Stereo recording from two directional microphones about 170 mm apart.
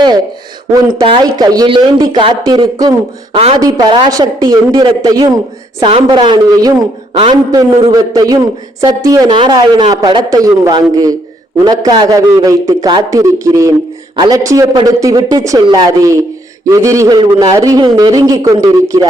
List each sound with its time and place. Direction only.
0.7 s a man's voice: 25° right (ahead or behind)
3.3 s a man's voice: 35° right (ahead or behind)
3.6 s a man's voice: 20° right (ahead or behind)
8.1 s a man's voice: 20° right (ahead or behind)